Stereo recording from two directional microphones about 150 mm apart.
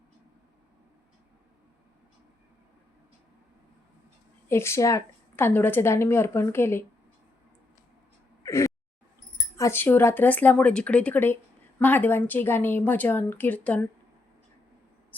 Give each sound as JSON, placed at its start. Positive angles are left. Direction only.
{"t": 4.4, "sound": "a woman's voice", "side_deg": 15}
{"t": 8.4, "sound": "whimper", "side_deg": 20}
{"t": 9.6, "sound": "a woman's voice", "side_deg": 15}